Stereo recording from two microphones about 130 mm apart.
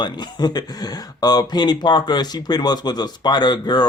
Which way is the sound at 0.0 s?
35° left (ahead or behind).